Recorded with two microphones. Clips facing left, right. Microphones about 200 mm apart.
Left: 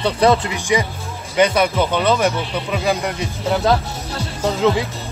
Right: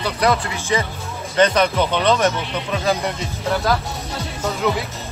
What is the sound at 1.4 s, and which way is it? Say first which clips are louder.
Speech: left 1 dB; 10° left (ahead or behind).